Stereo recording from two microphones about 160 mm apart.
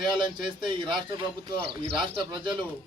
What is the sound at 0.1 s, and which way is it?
Speech, 30° right (ahead or behind).